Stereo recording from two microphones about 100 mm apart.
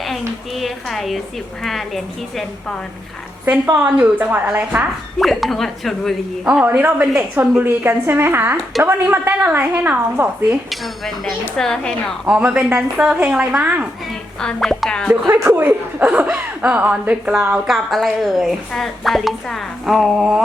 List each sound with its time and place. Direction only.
0.0 s a sound: centre (ahead or behind)
1.6 s speech: centre (ahead or behind)
3.8 s speech: 15° right (ahead or behind)
5.2 s speech: centre (ahead or behind)
6.4 s a woman's voice: 10° right (ahead or behind)
10.2 s a woman's voice: 25° right (ahead or behind)
10.5 s speech: centre (ahead or behind)
12.2 s speech: 5° right (ahead or behind)
14.4 s speech: 5° left (ahead or behind)
15.3 s speech: 20° right (ahead or behind); by 20.4 s 5° right (ahead or behind)